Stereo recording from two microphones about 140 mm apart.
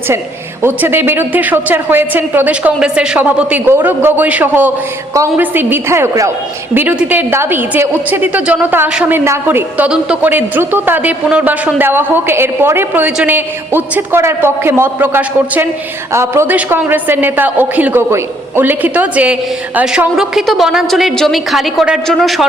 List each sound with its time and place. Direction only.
0.6 s a woman's voice: 15° right (ahead or behind); by 22.4 s centre (ahead or behind)